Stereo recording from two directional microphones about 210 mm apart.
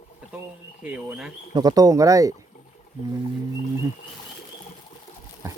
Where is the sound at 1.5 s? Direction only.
20° right (ahead or behind).